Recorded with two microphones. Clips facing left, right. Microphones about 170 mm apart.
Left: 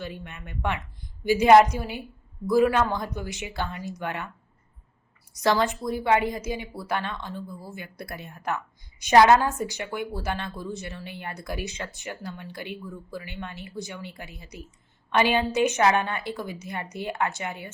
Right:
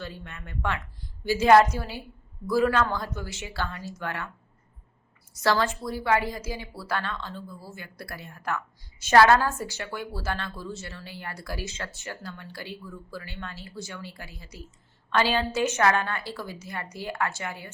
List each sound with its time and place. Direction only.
0.0 s speech: 15° left (ahead or behind)
5.3 s a woman's voice: 20° left (ahead or behind)